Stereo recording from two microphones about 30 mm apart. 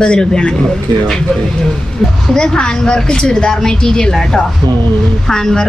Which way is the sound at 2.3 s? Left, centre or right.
Left.